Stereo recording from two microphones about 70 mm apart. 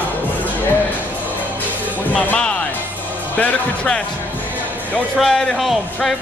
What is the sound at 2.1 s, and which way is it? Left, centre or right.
Speech, centre.